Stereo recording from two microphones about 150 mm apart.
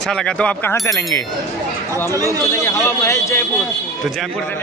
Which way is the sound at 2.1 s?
25° right (ahead or behind).